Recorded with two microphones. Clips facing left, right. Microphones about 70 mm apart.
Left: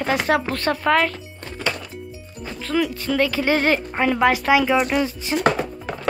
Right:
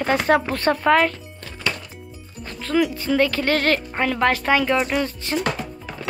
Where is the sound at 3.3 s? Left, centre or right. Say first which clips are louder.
Left 1 dB; centre.